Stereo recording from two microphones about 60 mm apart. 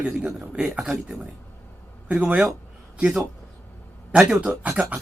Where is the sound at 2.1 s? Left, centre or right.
Right.